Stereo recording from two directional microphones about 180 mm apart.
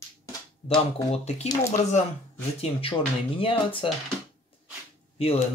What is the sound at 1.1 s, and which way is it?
Speech, 35° left (ahead or behind).